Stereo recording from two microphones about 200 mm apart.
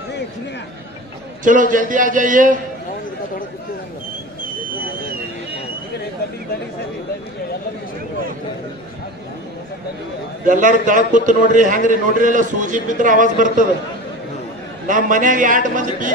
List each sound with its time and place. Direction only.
1.4 s a man's voice: 40° right (ahead or behind)
10.4 s a man's voice: 40° right (ahead or behind)
14.9 s a man's voice: 40° right (ahead or behind)